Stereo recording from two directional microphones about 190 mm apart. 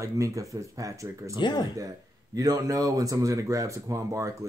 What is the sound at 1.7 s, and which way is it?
Speech, 20° right (ahead or behind).